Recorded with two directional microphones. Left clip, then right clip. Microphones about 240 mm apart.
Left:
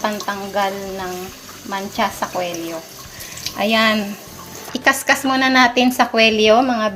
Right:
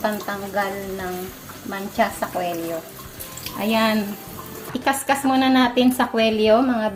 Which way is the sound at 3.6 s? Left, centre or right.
Left.